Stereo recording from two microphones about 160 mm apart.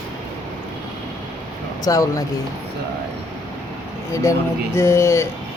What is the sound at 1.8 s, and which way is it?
Speech, 20° left (ahead or behind).